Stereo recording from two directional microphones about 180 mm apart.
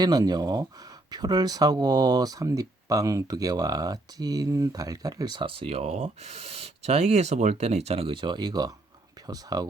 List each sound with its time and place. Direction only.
0.0 s speech: 20° right (ahead or behind)